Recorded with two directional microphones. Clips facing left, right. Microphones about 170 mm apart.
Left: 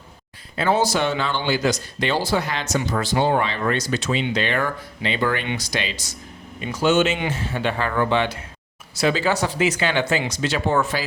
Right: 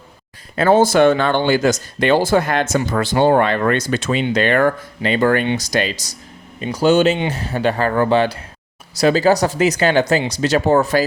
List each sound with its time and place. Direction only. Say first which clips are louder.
0.5 s speech: right 7 dB; 50° right (ahead or behind)